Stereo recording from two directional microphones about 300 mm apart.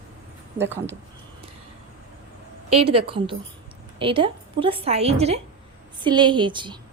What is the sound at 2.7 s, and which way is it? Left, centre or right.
A woman's voice, centre.